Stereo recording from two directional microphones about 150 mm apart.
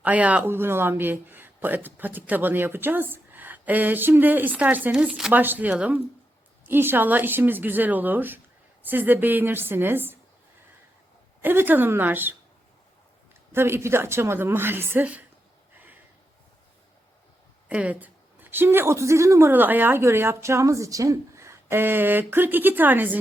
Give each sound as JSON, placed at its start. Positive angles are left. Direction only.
{"t": 0.0, "sound": "speech", "side_deg": -10}
{"t": 11.4, "sound": "speech", "side_deg": -15}
{"t": 13.5, "sound": "speech", "side_deg": -15}
{"t": 17.7, "sound": "speech", "side_deg": -10}